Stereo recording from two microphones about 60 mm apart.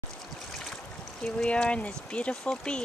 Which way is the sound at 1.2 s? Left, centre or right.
Centre.